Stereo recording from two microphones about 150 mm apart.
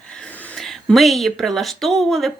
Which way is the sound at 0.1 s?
10° left (ahead or behind).